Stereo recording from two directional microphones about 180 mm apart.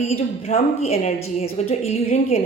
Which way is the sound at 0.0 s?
35° left (ahead or behind).